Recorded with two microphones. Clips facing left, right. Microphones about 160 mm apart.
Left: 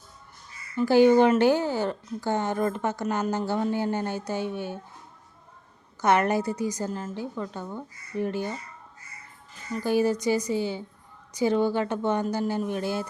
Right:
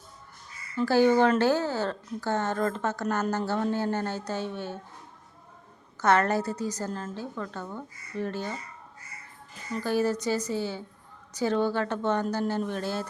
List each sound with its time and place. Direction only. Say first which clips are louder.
0.8 s speech: left 3 dB; 15° left (ahead or behind)
6.0 s speech: left 1 dB; 15° left (ahead or behind)
9.8 s speech: left 3 dB; 15° left (ahead or behind)